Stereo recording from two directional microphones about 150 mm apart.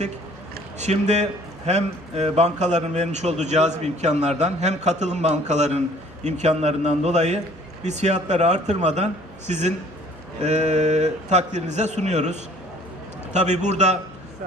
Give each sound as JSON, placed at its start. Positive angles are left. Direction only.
{"t": 0.8, "sound": "speech", "side_deg": -50}